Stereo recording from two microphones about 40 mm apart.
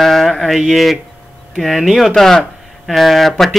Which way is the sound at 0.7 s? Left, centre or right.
Centre.